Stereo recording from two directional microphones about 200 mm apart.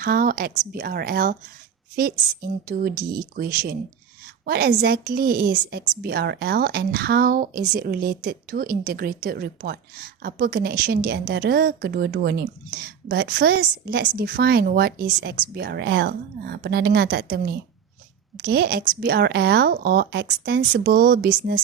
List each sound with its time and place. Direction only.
0.0 s a woman's voice: 45° right (ahead or behind)